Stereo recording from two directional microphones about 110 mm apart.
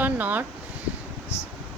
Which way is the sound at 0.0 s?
15° right (ahead or behind).